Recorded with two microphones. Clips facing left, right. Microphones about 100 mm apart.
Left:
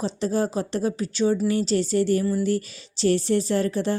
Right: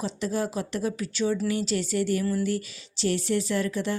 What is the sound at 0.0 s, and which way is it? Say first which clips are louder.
Speech: left 4 dB; 35° left (ahead or behind).